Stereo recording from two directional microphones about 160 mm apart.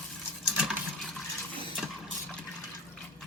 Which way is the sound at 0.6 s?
Centre (ahead or behind).